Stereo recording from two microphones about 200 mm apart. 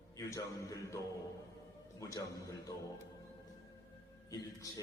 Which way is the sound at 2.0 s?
15° left (ahead or behind).